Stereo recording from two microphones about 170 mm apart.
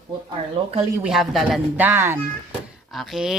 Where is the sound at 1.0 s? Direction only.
Centre (ahead or behind).